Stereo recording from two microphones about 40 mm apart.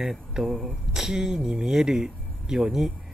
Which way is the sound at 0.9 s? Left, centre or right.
Centre.